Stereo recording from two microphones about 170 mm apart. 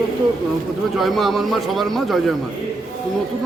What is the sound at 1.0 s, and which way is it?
Speech, centre (ahead or behind).